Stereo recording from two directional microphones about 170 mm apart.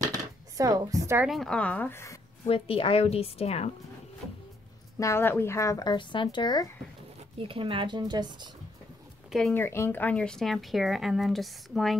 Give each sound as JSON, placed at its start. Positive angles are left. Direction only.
{"t": 0.0, "sound": "chopping", "side_deg": -20}
{"t": 1.2, "sound": "speech", "side_deg": 0}
{"t": 2.4, "sound": "a woman's voice", "side_deg": 35}
{"t": 4.9, "sound": "speech", "side_deg": 15}
{"t": 7.3, "sound": "speech", "side_deg": -30}
{"t": 9.5, "sound": "speech", "side_deg": 15}